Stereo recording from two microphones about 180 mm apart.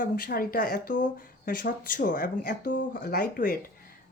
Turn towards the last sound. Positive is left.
turn(degrees=50)  # may be behind; listen again after turning